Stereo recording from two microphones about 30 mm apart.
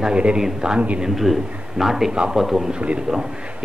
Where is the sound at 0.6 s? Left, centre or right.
Right.